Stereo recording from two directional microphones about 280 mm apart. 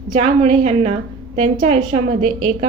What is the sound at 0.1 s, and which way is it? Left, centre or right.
A woman's voice, right.